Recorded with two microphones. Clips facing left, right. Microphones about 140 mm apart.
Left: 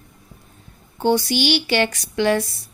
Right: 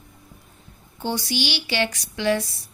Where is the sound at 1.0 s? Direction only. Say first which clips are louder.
Left 8 dB; 60° left (ahead or behind).